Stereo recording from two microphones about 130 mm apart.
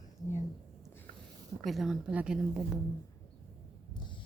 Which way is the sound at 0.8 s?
15° left (ahead or behind).